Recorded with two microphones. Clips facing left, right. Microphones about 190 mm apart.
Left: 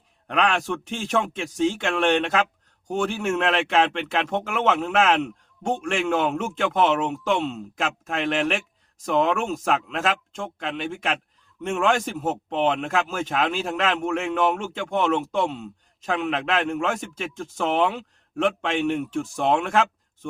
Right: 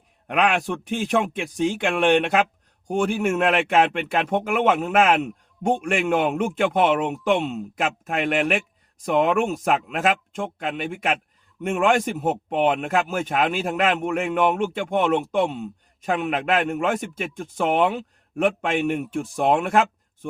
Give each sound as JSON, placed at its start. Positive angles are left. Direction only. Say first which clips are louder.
{"t": 0.3, "sound": "speech", "louder": "right 2 dB", "side_deg": -15}